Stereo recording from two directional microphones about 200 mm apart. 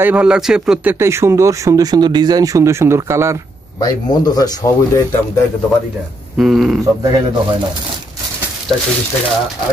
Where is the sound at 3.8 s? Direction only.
20° left (ahead or behind).